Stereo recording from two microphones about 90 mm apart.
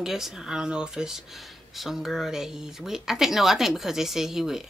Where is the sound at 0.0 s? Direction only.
5° right (ahead or behind).